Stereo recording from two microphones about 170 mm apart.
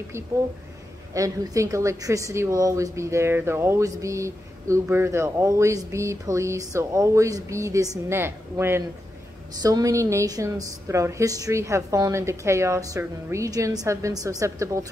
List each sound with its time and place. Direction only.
1.1 s a woman's voice: 20° right (ahead or behind)